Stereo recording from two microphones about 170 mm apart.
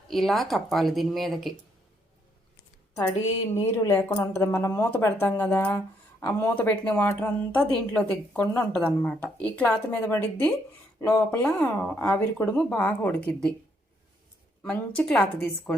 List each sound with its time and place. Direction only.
0.1 s a woman's voice: centre (ahead or behind)
2.9 s speech: 15° left (ahead or behind)
14.6 s a woman's voice: 5° left (ahead or behind)